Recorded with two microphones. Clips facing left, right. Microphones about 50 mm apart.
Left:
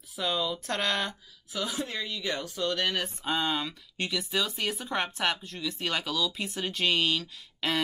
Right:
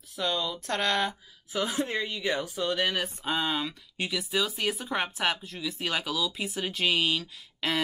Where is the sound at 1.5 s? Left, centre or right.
Right.